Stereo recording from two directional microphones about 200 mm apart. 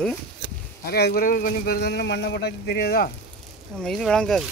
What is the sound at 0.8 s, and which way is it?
Speech, 50° left (ahead or behind).